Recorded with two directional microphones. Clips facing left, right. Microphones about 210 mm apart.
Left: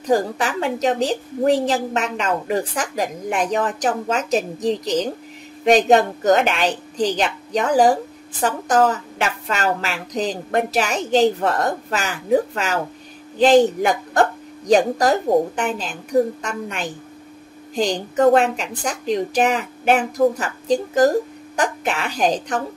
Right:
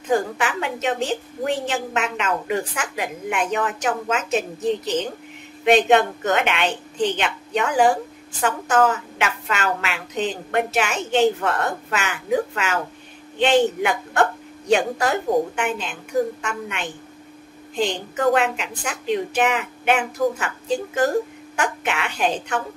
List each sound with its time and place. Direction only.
0.0 s a woman's voice: 35° left (ahead or behind)